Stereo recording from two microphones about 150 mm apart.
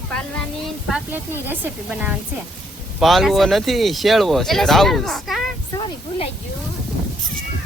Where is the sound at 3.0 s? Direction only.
Centre (ahead or behind).